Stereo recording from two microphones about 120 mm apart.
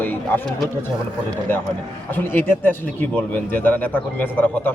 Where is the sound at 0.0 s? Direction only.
15° left (ahead or behind).